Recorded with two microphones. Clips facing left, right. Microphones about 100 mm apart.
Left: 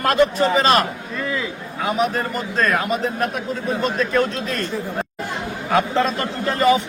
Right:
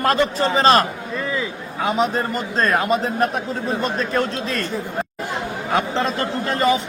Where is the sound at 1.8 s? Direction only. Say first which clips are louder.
Right 1 dB; 30° right (ahead or behind).